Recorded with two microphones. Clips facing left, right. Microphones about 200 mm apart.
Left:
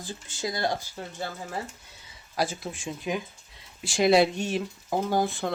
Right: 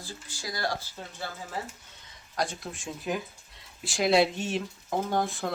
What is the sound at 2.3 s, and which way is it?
Speech, 5° left (ahead or behind).